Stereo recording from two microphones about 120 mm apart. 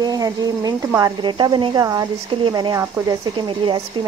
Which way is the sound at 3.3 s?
40° right (ahead or behind).